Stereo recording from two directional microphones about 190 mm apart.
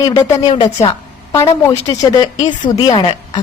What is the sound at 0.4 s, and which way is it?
Speech, 30° left (ahead or behind).